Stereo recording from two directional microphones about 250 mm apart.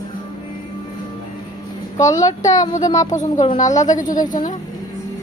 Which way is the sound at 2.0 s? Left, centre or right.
Centre.